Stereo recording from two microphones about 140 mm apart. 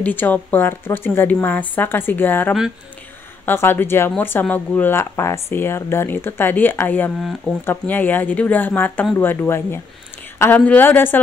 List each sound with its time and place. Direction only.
0.0 s speech: 10° left (ahead or behind)
7.2 s speech: centre (ahead or behind)
7.6 s speech: 15° left (ahead or behind)